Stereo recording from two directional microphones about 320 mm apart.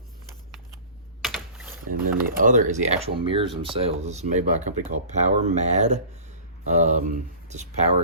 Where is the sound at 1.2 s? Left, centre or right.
Centre.